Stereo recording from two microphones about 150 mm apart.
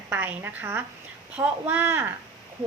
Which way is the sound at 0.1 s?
10° right (ahead or behind).